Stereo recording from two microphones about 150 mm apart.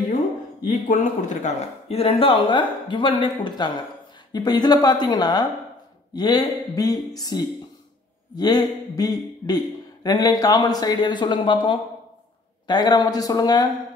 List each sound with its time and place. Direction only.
0.7 s speech: 60° left (ahead or behind); by 13.7 s 25° left (ahead or behind)